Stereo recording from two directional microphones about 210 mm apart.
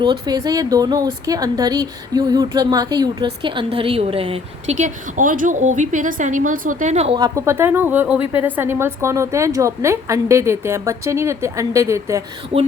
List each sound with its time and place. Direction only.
0.0 s speech: 20° right (ahead or behind)
4.8 s a woman's voice: 40° right (ahead or behind)
7.2 s a woman's voice: 15° right (ahead or behind)